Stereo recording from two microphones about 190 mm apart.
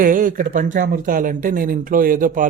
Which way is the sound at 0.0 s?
45° right (ahead or behind).